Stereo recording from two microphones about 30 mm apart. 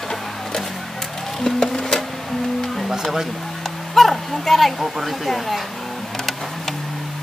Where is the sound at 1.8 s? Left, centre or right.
Centre.